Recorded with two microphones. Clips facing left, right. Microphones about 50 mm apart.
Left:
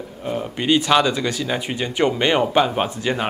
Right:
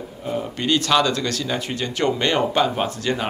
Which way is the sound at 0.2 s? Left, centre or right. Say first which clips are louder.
Left 1 dB; centre.